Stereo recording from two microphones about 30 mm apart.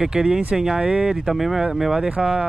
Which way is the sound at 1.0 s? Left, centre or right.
Centre.